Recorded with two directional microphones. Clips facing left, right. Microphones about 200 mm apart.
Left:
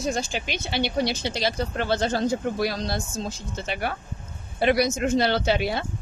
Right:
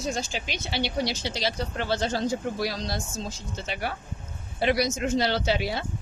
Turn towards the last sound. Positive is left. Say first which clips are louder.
# left 3 dB
turn(degrees=55)  # may be behind; listen again after turning